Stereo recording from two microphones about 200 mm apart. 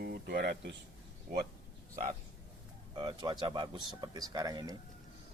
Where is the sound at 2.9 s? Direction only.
25° right (ahead or behind).